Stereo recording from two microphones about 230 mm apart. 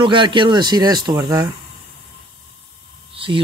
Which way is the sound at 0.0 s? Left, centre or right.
Right.